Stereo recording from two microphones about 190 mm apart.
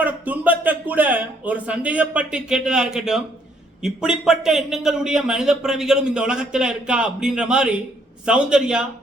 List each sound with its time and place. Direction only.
0.0 s speech: 10° right (ahead or behind)